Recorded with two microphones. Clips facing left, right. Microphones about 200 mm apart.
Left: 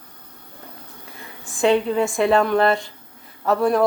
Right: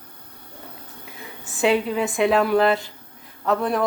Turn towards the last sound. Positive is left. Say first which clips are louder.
# left 3 dB
turn(degrees=0)  # may be behind; listen again after turning